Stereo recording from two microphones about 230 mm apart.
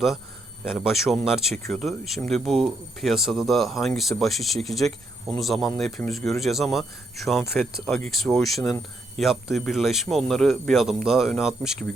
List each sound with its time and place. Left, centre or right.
0.6 s speech: centre